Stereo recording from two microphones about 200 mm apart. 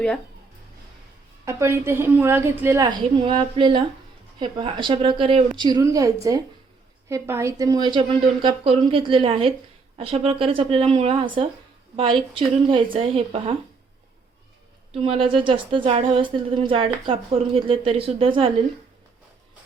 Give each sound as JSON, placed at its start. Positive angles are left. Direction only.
{"t": 1.5, "sound": "a woman's voice", "side_deg": -15}
{"t": 14.9, "sound": "speech", "side_deg": -30}